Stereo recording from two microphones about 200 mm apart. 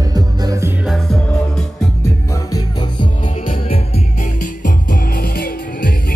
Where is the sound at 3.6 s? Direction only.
30° left (ahead or behind).